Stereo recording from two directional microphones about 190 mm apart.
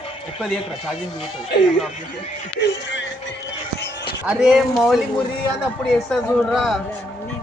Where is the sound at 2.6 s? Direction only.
70° left (ahead or behind).